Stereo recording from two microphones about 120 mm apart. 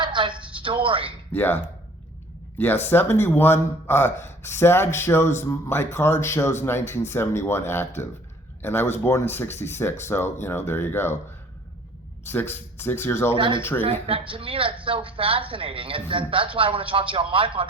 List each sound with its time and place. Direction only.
0.0 s a sound: 40° right (ahead or behind)
1.3 s speech: 15° left (ahead or behind)
12.3 s speech: 20° left (ahead or behind)
13.3 s a woman's voice: 45° right (ahead or behind)
13.6 s speech: 20° left (ahead or behind)
14.1 s a woman's voice: 45° right (ahead or behind)